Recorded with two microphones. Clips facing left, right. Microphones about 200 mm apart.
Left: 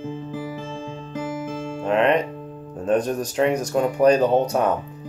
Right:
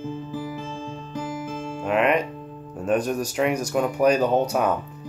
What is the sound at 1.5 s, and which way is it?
Music, 40° left (ahead or behind).